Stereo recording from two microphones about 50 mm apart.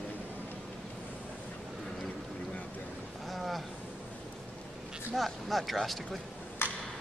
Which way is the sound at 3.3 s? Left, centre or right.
Centre.